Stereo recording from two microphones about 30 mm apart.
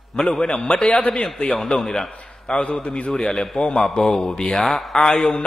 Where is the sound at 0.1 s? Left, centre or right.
Left.